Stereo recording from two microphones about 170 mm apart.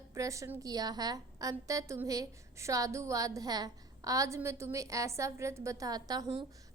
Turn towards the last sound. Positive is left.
turn(degrees=-20)  # may be behind; listen again after turning